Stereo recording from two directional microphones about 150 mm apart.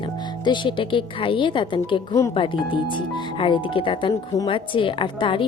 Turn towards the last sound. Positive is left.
turn(degrees=35)  # may be behind; listen again after turning